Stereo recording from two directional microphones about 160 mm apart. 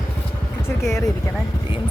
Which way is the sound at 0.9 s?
20° left (ahead or behind).